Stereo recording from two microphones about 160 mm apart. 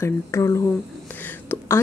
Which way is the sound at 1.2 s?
10° left (ahead or behind).